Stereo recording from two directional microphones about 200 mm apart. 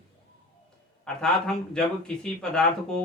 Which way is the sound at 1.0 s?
5° left (ahead or behind).